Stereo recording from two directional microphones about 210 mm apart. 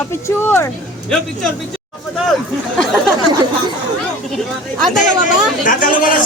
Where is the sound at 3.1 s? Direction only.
20° right (ahead or behind).